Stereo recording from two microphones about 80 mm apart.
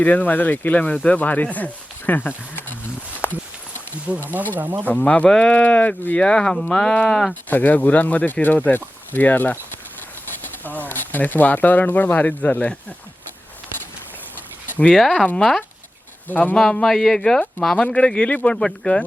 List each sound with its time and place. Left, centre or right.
0.0 s speech: left
3.2 s walk: centre
4.1 s speech: centre
4.9 s speech: centre
7.3 s speech: left
14.9 s speech: centre
16.3 s speech: left
16.8 s speech: centre